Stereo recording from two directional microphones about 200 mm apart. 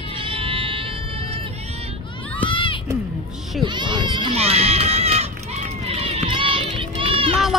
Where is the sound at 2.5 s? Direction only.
25° left (ahead or behind).